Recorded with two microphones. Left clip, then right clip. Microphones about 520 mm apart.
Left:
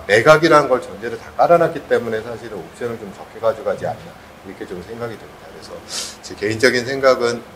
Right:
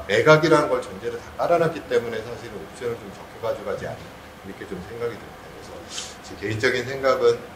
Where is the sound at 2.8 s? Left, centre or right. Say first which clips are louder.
Left 3 dB; left.